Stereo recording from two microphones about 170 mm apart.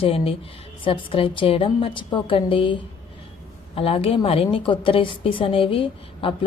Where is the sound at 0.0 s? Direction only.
35° left (ahead or behind).